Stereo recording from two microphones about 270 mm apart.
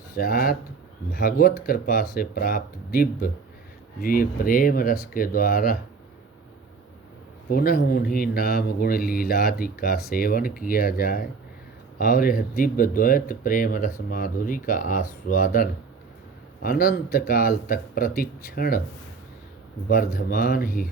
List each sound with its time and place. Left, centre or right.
0.2 s speech: left
7.5 s speech: left
19.9 s speech: left